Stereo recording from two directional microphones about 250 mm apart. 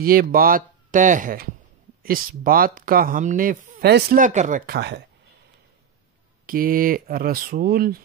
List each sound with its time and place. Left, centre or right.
0.0 s speech: right
6.4 s speech: right